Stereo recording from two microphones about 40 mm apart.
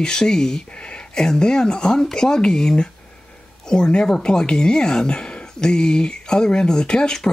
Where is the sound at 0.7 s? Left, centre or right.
Left.